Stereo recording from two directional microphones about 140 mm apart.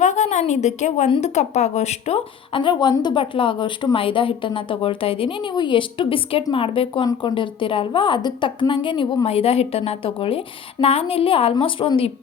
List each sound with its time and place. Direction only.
0.0 s a woman's voice: 55° left (ahead or behind); by 12.1 s 40° left (ahead or behind)